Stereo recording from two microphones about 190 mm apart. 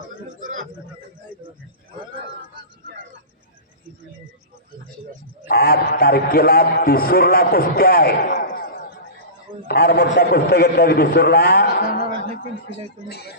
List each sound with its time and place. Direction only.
5.5 s a man's voice: 55° left (ahead or behind)
9.6 s a man's voice: 55° left (ahead or behind)